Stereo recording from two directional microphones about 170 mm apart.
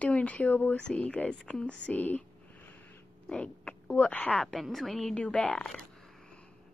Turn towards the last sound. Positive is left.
turn(degrees=5)  # may be behind; listen again after turning